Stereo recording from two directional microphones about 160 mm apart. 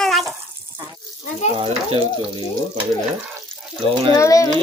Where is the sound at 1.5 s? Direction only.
35° right (ahead or behind).